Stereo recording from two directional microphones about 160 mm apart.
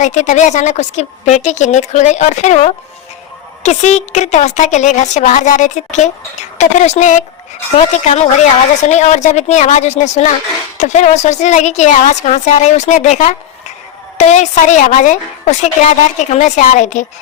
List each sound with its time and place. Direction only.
0.0 s a woman's voice: 45° left (ahead or behind)